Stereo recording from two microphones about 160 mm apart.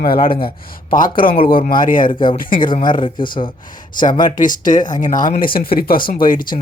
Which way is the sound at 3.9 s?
60° left (ahead or behind).